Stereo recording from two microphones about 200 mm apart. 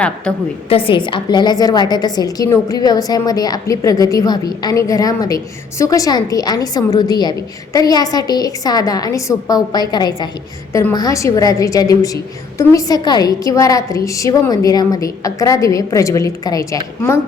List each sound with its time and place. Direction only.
0.3 s a woman's voice: 5° left (ahead or behind)
0.7 s a woman's voice: 25° left (ahead or behind)